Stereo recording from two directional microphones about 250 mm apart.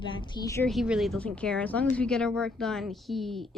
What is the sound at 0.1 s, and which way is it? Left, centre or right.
Speech, centre.